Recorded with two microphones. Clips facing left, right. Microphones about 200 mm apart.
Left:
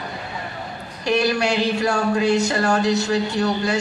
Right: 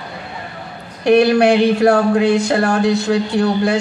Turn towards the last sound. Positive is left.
turn(degrees=-55)  # may be behind; listen again after turning